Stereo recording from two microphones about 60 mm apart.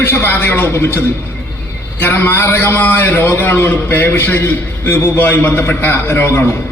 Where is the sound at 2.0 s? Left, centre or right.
Left.